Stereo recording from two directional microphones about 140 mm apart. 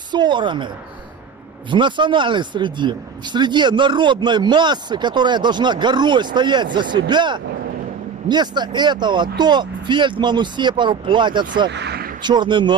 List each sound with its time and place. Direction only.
0.1 s speech: 35° right (ahead or behind)
1.7 s speech: 35° right (ahead or behind)